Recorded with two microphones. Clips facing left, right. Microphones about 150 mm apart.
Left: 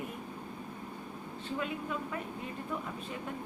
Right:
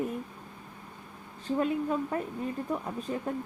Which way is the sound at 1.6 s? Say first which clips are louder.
Right 9 dB; 40° right (ahead or behind).